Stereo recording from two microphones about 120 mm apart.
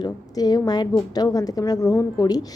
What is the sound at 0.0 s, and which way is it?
A woman's voice, 35° left (ahead or behind).